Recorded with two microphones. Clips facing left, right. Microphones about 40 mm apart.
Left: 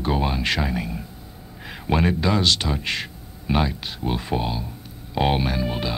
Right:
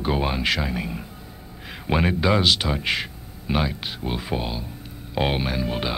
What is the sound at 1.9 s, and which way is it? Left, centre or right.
Speech, centre.